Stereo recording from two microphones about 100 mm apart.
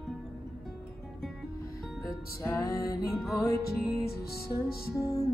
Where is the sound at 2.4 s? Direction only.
35° left (ahead or behind).